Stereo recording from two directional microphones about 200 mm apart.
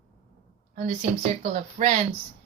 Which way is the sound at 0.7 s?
40° right (ahead or behind).